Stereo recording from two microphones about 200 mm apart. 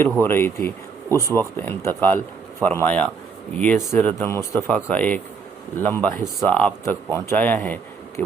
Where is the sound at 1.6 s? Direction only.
10° left (ahead or behind).